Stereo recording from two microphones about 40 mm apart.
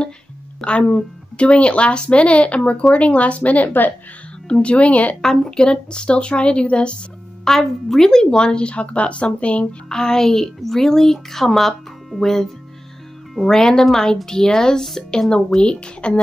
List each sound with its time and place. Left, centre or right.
0.6 s a woman's voice: left
5.2 s a woman's voice: centre
5.6 s speech: left
7.4 s speech: centre; by 9.8 s left
9.8 s a woman's voice: centre